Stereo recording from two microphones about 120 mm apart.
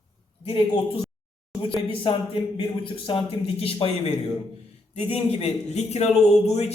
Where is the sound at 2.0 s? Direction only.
45° left (ahead or behind); by 6.7 s 60° left (ahead or behind).